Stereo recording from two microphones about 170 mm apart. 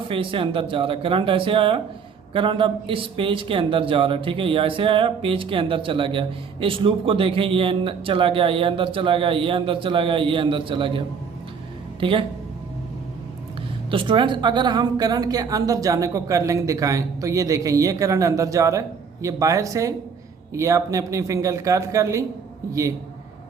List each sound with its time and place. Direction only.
0.1 s a woman's voice: 30° right (ahead or behind)
13.9 s a woman's voice: 30° right (ahead or behind)